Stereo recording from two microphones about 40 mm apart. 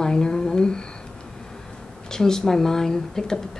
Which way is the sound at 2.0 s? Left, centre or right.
Centre.